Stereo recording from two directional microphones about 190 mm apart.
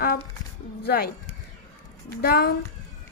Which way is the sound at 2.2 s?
50° left (ahead or behind).